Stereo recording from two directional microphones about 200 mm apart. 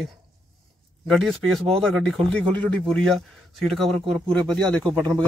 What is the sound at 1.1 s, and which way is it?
Speech, centre (ahead or behind).